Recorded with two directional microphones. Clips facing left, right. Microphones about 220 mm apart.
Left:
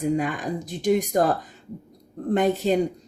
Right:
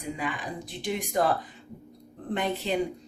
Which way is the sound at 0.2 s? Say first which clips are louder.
Left 7 dB; 45° left (ahead or behind).